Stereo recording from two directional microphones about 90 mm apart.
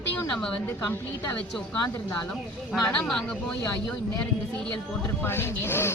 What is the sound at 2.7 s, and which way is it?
Speech, 5° left (ahead or behind).